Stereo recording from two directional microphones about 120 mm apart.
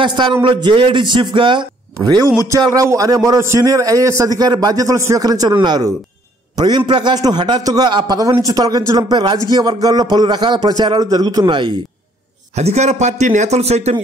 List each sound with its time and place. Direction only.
0.0 s speech: 40° right (ahead or behind)
2.0 s a man's voice: 30° right (ahead or behind)
12.5 s speech: 70° right (ahead or behind)